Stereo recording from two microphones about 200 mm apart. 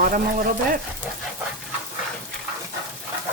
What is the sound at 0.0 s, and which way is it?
Speech, 40° right (ahead or behind).